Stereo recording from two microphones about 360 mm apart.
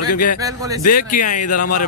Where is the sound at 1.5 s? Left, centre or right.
Left.